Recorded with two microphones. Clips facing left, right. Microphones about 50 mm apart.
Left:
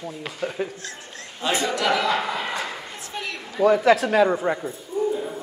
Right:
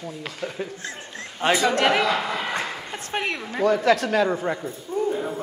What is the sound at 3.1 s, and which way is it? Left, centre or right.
Speech, right.